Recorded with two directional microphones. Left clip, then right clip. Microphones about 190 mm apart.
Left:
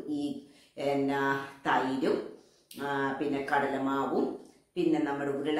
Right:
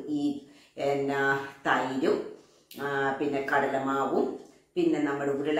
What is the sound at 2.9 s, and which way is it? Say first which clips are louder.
Speech: right 3 dB; centre (ahead or behind).